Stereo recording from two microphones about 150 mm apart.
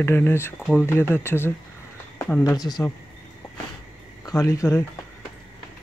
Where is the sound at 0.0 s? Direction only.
15° left (ahead or behind).